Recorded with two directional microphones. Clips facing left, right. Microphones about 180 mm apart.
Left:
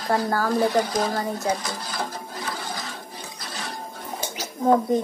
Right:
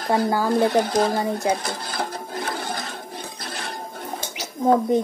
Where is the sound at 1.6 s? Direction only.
55° right (ahead or behind).